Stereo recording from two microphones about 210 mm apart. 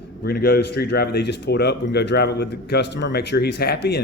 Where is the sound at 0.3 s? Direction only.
45° left (ahead or behind).